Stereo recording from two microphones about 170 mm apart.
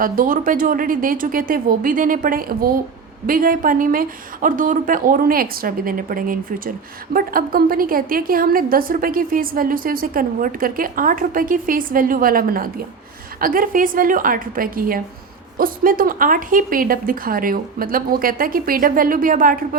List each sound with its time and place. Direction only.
0.0 s a woman's voice: 55° right (ahead or behind)